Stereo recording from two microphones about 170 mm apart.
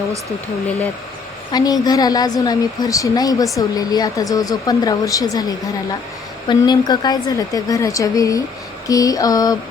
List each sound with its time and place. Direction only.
1.5 s speech: 20° left (ahead or behind)